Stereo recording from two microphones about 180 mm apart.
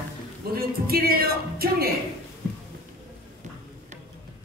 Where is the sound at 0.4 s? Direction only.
60° right (ahead or behind).